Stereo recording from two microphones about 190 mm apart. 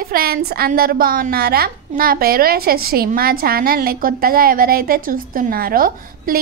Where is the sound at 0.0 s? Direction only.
50° right (ahead or behind).